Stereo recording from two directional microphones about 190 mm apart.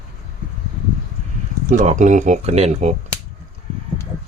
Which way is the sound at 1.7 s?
40° right (ahead or behind).